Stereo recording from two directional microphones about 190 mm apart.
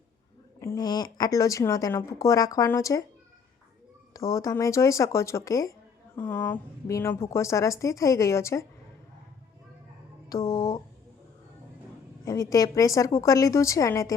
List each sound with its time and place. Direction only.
0.6 s a woman's voice: 15° left (ahead or behind)
4.1 s a woman's voice: 15° left (ahead or behind)
10.2 s a woman's voice: 20° left (ahead or behind)
12.2 s a woman's voice: 15° left (ahead or behind)